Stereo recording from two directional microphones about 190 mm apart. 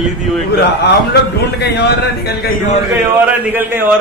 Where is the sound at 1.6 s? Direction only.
60° left (ahead or behind).